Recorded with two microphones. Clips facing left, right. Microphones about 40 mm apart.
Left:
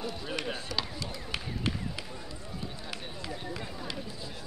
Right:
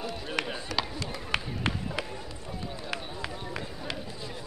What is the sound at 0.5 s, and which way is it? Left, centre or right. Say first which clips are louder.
Chop: right 2 dB; centre.